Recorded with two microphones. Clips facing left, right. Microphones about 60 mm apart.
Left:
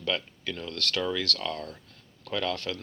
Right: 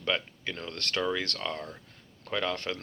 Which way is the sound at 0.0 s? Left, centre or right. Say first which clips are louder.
Even; right.